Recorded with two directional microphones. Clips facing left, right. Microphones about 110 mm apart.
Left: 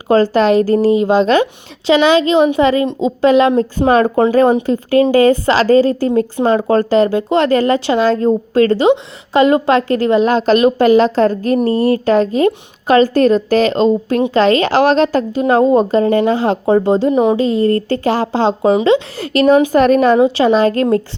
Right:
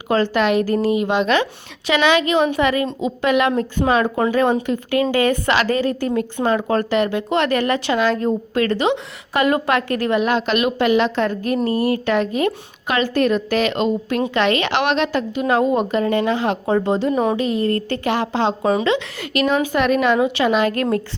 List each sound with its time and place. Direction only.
0.1 s a woman's voice: 35° left (ahead or behind)